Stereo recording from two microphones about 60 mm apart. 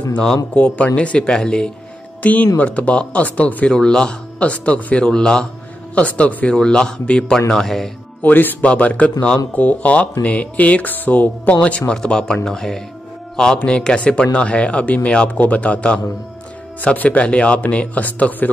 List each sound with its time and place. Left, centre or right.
0.6 s speech: centre
2.2 s speech: left
3.7 s speech: centre
8.2 s speech: left
11.9 s speech: centre